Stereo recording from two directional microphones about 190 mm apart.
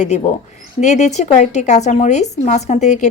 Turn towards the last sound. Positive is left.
turn(degrees=40)  # may be behind; listen again after turning